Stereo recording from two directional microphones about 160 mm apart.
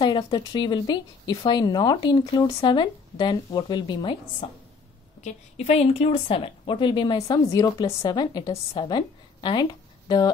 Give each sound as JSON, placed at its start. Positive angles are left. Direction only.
{"t": 0.0, "sound": "a woman's voice", "side_deg": 25}
{"t": 5.2, "sound": "a woman's voice", "side_deg": 40}